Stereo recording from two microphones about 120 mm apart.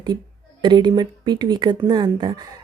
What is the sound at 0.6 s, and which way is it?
Speech, 40° right (ahead or behind).